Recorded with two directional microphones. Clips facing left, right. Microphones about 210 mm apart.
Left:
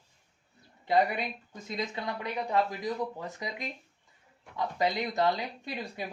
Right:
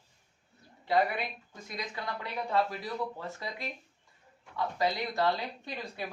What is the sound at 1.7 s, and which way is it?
Speech, 25° left (ahead or behind).